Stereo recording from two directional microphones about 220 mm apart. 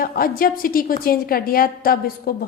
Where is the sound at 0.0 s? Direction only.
40° left (ahead or behind).